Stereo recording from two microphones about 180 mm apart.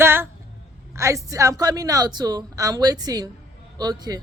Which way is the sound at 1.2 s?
20° right (ahead or behind).